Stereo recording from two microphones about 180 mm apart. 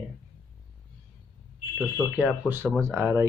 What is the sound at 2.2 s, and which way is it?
Speech, 5° right (ahead or behind).